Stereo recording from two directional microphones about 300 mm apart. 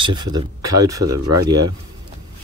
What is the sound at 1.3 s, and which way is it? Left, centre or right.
Speech, right.